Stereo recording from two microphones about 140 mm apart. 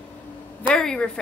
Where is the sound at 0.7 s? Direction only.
5° left (ahead or behind).